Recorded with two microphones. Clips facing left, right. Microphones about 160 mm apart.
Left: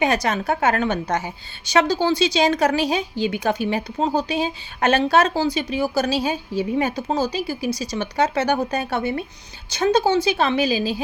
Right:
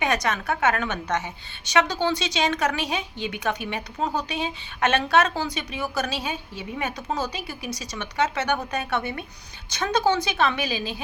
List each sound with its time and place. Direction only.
0.0 s a woman's voice: 30° left (ahead or behind)